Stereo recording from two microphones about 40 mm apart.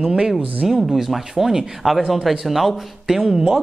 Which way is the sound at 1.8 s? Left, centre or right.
Centre.